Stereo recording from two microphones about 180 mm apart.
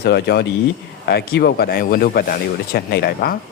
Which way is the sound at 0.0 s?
60° left (ahead or behind).